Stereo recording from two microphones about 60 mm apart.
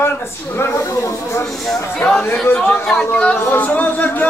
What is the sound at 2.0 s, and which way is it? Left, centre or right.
Speech, left.